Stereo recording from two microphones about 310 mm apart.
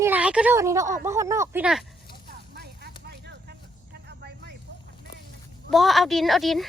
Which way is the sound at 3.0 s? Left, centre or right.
Right.